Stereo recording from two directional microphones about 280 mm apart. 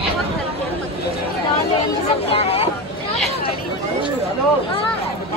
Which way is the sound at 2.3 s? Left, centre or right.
Left.